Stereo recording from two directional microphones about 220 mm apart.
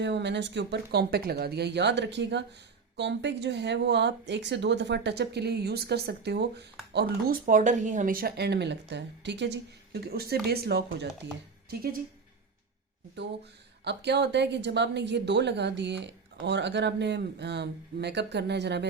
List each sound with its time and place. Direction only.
0.0 s a woman's voice: 50° right (ahead or behind)
13.8 s a woman's voice: 50° right (ahead or behind)